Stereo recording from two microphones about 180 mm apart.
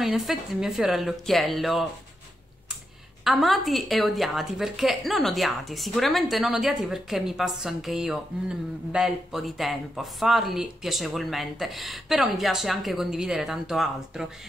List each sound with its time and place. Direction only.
0.0 s a woman's voice: centre (ahead or behind)
3.3 s a woman's voice: centre (ahead or behind)